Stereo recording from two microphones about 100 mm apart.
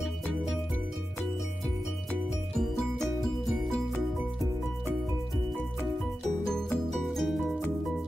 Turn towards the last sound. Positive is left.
turn(degrees=0)  # may be behind; listen again after turning